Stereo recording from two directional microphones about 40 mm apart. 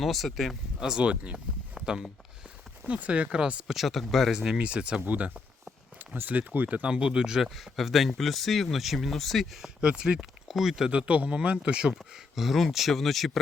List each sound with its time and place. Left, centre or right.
0.0 s speech: centre
0.9 s speech: right
1.8 s speech: centre
2.8 s speech: right
3.1 s speech: right
3.7 s speech: centre
4.5 s speech: right
5.0 s speech: right
6.8 s speech: right
7.4 s speech: centre
9.8 s speech: right
10.5 s speech: centre
10.9 s speech: right
12.4 s speech: centre